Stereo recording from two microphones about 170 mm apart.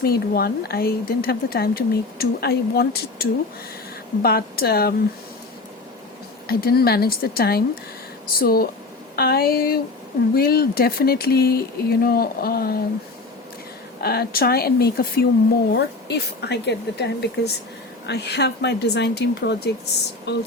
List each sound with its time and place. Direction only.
0.0 s speech: 65° left (ahead or behind)
6.5 s speech: 65° left (ahead or behind)
14.0 s speech: 65° left (ahead or behind)
15.7 s a woman's voice: 75° left (ahead or behind)